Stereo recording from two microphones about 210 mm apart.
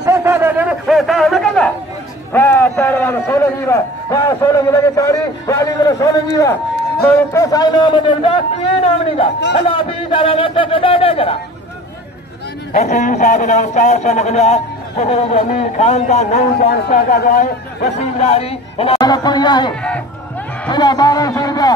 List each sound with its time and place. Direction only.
0.0 s a sound: 15° right (ahead or behind); by 6.6 s 15° left (ahead or behind)
7.3 s a man's voice: 15° left (ahead or behind)
12.7 s speech: 35° left (ahead or behind)
16.5 s speech: 45° left (ahead or behind); by 19.7 s 20° left (ahead or behind)
19.7 s a sound: 5° left (ahead or behind)
20.7 s a man's voice: 20° left (ahead or behind)